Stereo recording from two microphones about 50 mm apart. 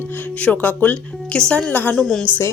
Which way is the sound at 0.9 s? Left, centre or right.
Left.